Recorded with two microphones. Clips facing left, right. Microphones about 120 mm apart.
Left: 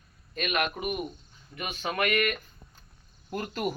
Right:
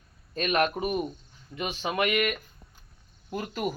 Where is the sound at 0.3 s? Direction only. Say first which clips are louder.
Right 4 dB; 35° right (ahead or behind).